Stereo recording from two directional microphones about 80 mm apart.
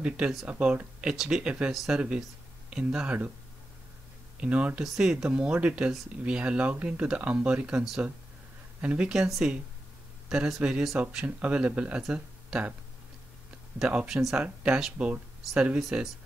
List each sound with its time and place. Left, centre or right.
0.5 s speech: centre
2.0 s speech: centre
4.4 s speech: centre
13.7 s speech: centre
15.8 s speech: centre